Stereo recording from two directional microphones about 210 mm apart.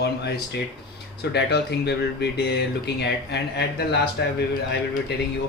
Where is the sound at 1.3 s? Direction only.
50° left (ahead or behind).